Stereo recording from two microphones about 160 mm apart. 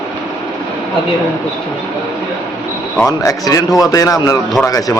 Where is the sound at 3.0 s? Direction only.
20° left (ahead or behind).